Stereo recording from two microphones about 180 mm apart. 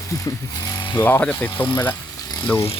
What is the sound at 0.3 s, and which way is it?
Speech, 20° left (ahead or behind).